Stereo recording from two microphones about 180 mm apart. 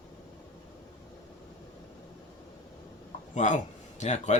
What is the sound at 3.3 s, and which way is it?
A man's voice, 45° left (ahead or behind).